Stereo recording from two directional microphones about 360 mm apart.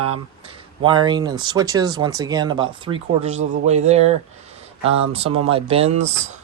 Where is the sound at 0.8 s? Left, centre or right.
Centre.